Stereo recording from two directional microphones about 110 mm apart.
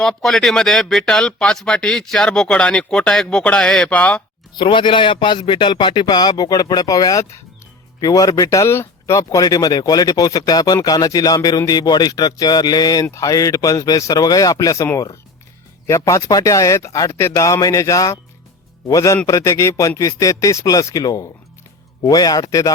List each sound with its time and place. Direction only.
0.0 s speech: 5° left (ahead or behind)
4.5 s a man's voice: 45° left (ahead or behind); by 22.7 s 30° left (ahead or behind)